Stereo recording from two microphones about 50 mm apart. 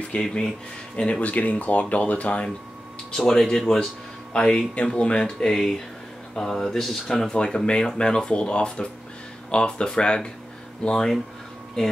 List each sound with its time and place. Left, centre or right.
0.2 s speech: centre
3.1 s speech: centre
6.3 s speech: centre